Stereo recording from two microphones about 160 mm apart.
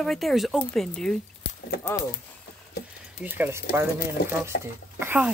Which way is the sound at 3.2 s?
10° right (ahead or behind).